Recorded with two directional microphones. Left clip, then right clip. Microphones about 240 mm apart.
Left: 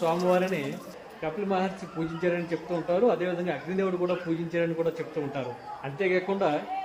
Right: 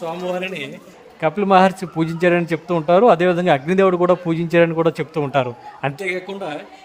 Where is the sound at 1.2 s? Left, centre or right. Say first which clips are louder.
Right 15 dB; right.